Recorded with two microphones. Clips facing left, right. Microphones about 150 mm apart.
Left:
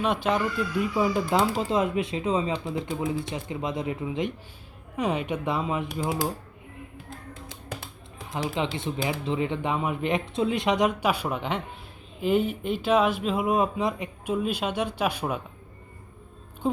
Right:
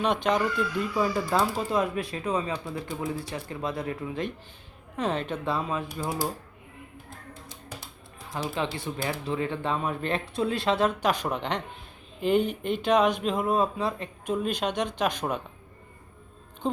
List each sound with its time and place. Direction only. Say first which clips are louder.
0.0 s speech: even; 5° left (ahead or behind)
0.9 s speech: left 1 dB; 20° left (ahead or behind)
8.3 s speech: left 2 dB; 20° left (ahead or behind)
14.3 s speech: left 1 dB; 5° left (ahead or behind)
16.6 s speech: left 3 dB; 5° left (ahead or behind)